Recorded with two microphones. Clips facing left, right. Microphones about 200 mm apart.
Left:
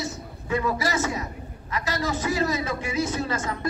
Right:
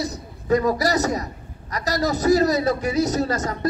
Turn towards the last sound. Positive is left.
turn(degrees=-40)  # may be behind; listen again after turning